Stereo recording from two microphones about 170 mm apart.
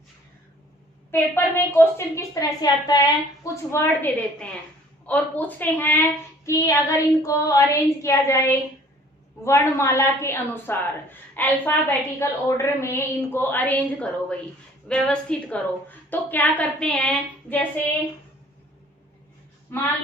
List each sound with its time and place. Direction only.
1.1 s a woman's voice: 15° left (ahead or behind)